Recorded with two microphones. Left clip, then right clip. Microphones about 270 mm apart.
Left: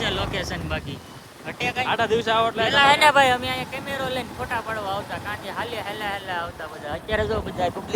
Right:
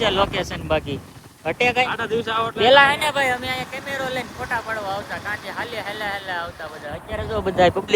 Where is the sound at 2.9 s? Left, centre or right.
Left.